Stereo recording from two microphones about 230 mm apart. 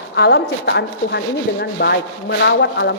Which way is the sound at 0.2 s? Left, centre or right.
Left.